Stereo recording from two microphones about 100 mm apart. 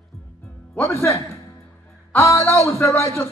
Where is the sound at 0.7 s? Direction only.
25° left (ahead or behind).